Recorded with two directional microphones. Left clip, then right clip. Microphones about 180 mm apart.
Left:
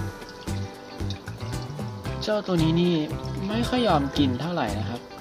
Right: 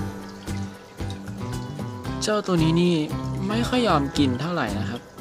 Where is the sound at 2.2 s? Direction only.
25° right (ahead or behind).